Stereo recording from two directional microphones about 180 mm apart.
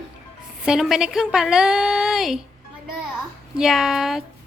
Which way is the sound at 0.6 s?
5° right (ahead or behind).